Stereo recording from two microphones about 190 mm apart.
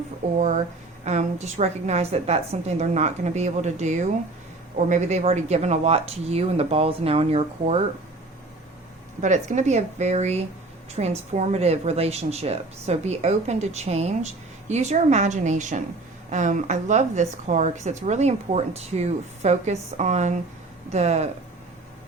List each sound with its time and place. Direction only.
0.3 s a woman's voice: 40° right (ahead or behind)
9.2 s a woman's voice: 40° right (ahead or behind)